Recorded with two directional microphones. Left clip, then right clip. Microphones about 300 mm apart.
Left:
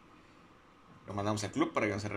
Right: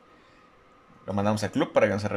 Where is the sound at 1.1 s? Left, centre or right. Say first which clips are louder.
Right 8 dB; right.